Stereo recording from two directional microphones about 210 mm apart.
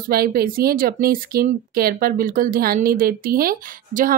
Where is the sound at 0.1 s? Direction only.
45° right (ahead or behind).